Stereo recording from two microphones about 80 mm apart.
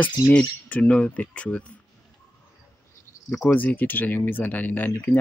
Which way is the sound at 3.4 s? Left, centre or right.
Left.